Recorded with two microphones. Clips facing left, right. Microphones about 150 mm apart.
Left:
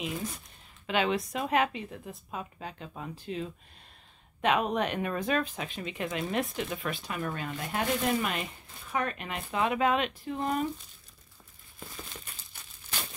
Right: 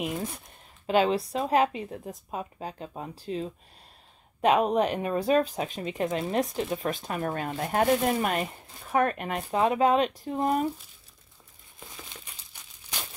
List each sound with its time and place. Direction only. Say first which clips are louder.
0.8 s speech: right 5 dB; 35° right (ahead or behind)